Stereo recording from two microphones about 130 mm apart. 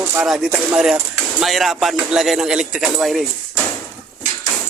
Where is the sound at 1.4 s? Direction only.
Centre (ahead or behind).